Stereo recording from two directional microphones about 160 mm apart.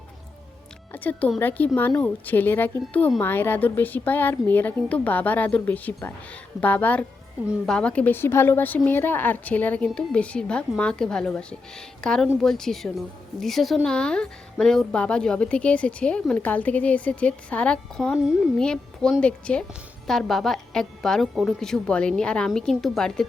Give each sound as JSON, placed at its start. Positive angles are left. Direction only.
{"t": 0.9, "sound": "a woman's voice", "side_deg": 10}
{"t": 18.1, "sound": "a woman's voice", "side_deg": -5}
{"t": 18.6, "sound": "a woman's voice", "side_deg": 5}